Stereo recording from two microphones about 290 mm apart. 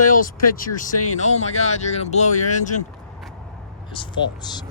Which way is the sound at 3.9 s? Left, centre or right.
Centre.